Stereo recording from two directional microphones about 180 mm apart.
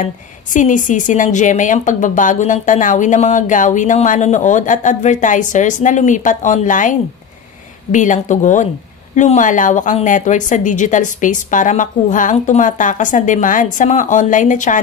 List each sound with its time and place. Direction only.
0.0 s a woman's voice: 45° left (ahead or behind)